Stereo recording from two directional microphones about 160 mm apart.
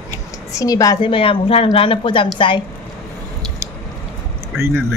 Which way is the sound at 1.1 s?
35° left (ahead or behind).